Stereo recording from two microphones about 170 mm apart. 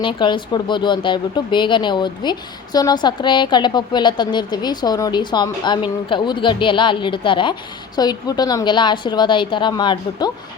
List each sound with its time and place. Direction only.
0.0 s speech: 30° left (ahead or behind)